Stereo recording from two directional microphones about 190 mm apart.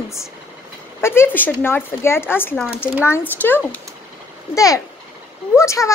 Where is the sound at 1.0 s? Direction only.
10° left (ahead or behind).